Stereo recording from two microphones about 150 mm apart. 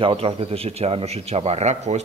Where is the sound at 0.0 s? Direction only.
35° right (ahead or behind).